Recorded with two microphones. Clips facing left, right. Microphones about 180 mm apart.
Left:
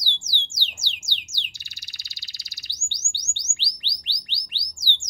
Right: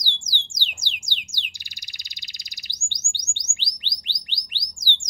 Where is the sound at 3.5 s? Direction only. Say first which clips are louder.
Even; 15° right (ahead or behind).